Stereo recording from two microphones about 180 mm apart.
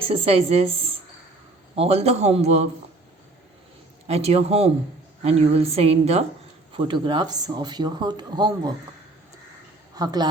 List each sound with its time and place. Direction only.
0.0 s a woman's voice: 30° right (ahead or behind)
4.0 s a woman's voice: 35° right (ahead or behind)
9.9 s a woman's voice: 20° right (ahead or behind)